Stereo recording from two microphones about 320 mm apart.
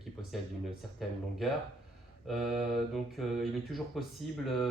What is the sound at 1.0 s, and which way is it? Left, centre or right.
Speech, centre.